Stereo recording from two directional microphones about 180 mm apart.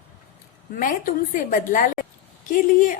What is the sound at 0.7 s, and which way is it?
A woman's voice, 50° left (ahead or behind).